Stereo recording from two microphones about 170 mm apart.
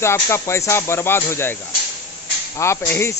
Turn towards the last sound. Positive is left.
turn(degrees=15)  # may be behind; listen again after turning